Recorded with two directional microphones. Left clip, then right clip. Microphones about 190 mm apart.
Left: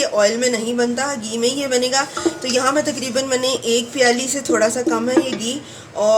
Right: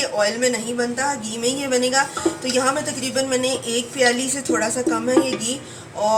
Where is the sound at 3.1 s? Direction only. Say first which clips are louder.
Left 1 dB; 50° left (ahead or behind).